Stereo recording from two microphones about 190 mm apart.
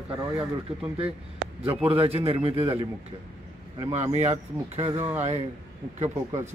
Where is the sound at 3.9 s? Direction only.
35° right (ahead or behind).